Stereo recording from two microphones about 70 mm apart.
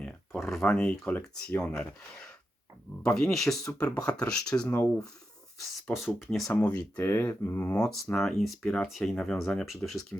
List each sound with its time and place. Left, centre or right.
0.4 s speech: centre
3.0 s speech: centre
5.5 s speech: centre
6.5 s speech: centre
7.0 s speech: left
8.0 s speech: centre